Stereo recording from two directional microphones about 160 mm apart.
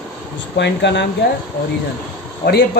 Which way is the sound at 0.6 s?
90° left.